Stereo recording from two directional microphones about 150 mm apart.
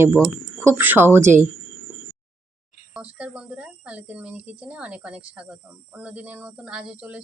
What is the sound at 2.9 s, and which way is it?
A woman's voice, 10° right (ahead or behind).